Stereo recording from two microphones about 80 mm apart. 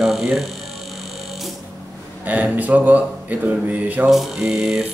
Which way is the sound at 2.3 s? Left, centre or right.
Centre.